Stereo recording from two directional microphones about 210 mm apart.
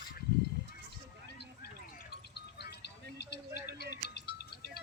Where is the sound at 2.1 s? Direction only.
50° left (ahead or behind).